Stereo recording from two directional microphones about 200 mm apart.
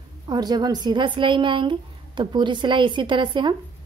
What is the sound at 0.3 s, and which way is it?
Speech, 20° right (ahead or behind).